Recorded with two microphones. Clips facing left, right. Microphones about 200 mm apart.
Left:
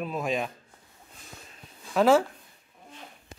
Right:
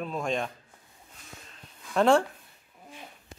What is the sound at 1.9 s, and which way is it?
Speech, 5° left (ahead or behind).